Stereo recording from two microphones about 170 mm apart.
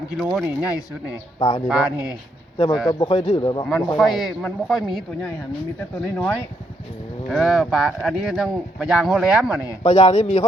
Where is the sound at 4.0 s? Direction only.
Centre (ahead or behind).